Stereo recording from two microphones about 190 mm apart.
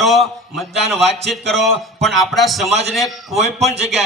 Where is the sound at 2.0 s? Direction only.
Centre (ahead or behind).